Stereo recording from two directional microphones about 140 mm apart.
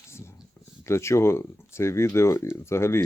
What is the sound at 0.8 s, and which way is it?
Speech, 20° left (ahead or behind).